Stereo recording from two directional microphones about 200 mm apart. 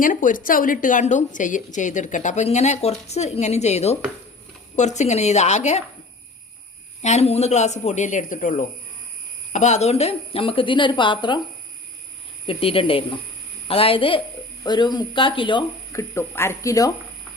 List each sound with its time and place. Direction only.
0.0 s a woman's voice: 40° left (ahead or behind)
7.0 s a woman's voice: 35° left (ahead or behind)
12.5 s speech: 30° left (ahead or behind)